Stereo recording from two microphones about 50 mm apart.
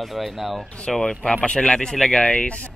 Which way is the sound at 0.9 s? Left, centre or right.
Centre.